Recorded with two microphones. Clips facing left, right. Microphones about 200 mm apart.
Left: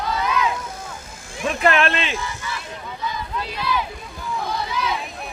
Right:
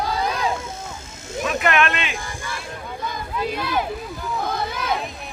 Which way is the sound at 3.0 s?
50° right (ahead or behind).